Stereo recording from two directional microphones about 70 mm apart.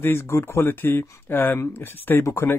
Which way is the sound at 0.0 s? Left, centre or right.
Left.